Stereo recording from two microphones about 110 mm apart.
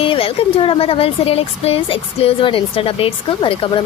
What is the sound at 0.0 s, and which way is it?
Speech, 55° left (ahead or behind).